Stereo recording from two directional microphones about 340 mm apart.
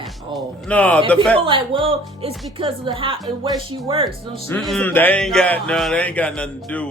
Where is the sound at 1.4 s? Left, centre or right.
Centre.